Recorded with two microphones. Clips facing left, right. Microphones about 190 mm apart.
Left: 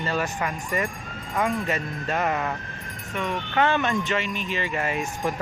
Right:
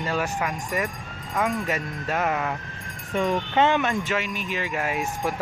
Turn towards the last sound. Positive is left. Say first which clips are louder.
# even
turn(degrees=-5)  # may be behind; listen again after turning